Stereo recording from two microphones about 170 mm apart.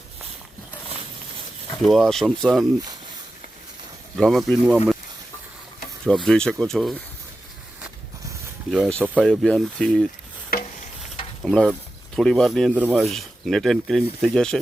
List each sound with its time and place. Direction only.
1.8 s speech: centre (ahead or behind)
4.2 s speech: centre (ahead or behind)
6.2 s speech: 5° left (ahead or behind)
8.7 s speech: centre (ahead or behind)
10.5 s a sound: 60° left (ahead or behind)
11.4 s speech: 5° left (ahead or behind)
12.7 s speech: 10° right (ahead or behind)
13.1 s speech: centre (ahead or behind)